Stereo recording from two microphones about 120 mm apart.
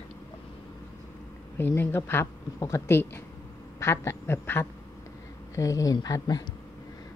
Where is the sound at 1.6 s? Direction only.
20° left (ahead or behind).